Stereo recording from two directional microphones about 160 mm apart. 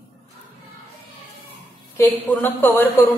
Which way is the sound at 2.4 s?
15° left (ahead or behind).